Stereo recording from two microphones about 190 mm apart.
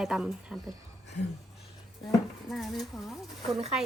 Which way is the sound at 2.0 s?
25° left (ahead or behind).